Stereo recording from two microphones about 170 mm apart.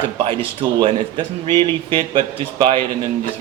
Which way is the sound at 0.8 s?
30° right (ahead or behind).